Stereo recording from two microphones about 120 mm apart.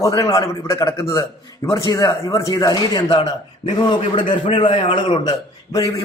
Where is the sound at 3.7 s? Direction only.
40° left (ahead or behind).